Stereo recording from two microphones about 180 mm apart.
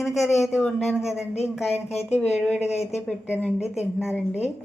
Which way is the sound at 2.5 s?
35° left (ahead or behind).